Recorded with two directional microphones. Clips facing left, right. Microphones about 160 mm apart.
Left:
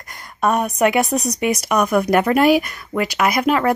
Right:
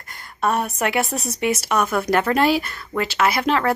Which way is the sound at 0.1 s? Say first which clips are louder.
Left 3 dB; 15° left (ahead or behind).